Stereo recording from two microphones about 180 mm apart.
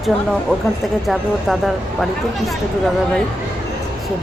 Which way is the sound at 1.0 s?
Centre (ahead or behind).